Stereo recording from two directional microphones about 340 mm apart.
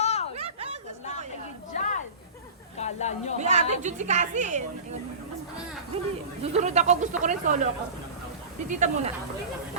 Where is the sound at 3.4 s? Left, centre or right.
Centre.